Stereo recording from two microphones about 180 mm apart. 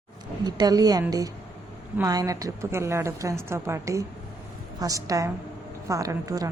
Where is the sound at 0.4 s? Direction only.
20° right (ahead or behind).